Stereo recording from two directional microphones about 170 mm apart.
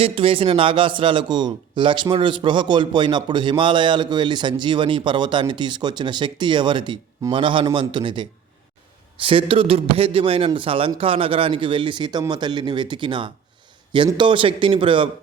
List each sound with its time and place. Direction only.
0.0 s a man's voice: 30° right (ahead or behind)